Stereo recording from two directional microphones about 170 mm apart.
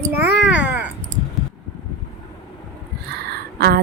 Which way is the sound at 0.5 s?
10° right (ahead or behind).